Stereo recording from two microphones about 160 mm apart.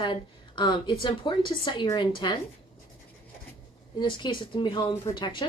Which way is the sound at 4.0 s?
30° left (ahead or behind).